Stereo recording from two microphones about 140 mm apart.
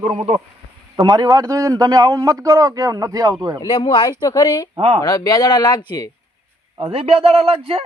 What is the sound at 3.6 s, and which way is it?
Speech, 35° left (ahead or behind).